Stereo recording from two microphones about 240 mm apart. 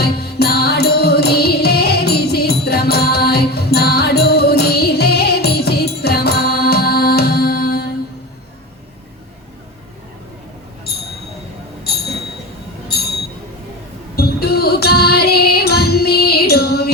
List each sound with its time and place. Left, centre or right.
0.0 s music: left
12.9 s a sound: left
14.2 s music: left